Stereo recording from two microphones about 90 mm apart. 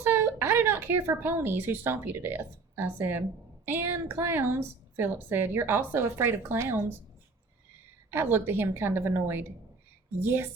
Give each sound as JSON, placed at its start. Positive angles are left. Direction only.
{"t": 0.0, "sound": "a woman's voice", "side_deg": -25}
{"t": 8.1, "sound": "a woman's voice", "side_deg": -25}